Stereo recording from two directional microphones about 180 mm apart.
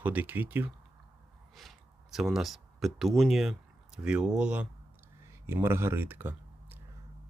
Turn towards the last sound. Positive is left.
turn(degrees=-10)  # may be behind; listen again after turning